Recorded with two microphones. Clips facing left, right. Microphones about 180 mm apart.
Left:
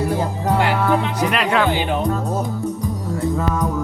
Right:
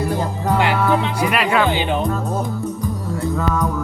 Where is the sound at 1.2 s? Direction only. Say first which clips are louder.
Right 1 dB; 5° right (ahead or behind).